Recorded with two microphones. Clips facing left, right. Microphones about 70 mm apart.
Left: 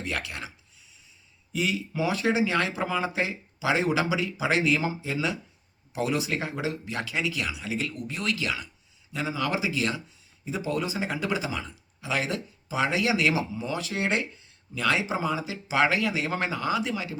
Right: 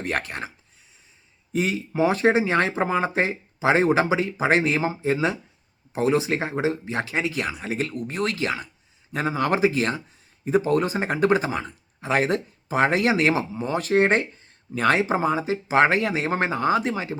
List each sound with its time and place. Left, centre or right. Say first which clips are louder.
0.0 s speech: right 5 dB; right
1.5 s speech: right 5 dB; right